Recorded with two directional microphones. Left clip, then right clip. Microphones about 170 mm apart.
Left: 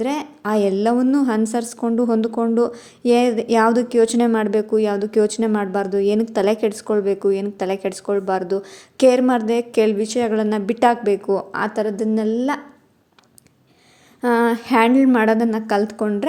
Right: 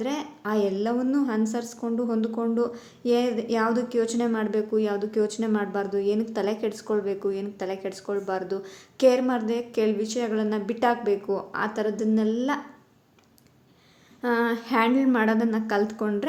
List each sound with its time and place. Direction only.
0.0 s a woman's voice: 45° left (ahead or behind)
14.2 s speech: 45° left (ahead or behind)